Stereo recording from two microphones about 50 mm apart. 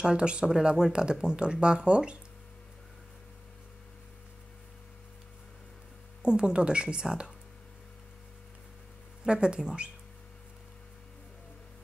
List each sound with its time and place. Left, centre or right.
0.0 s a woman's voice: centre
6.2 s a woman's voice: centre
9.2 s speech: centre